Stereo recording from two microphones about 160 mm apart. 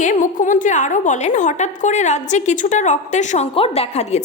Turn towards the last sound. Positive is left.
turn(degrees=40)  # may be behind; listen again after turning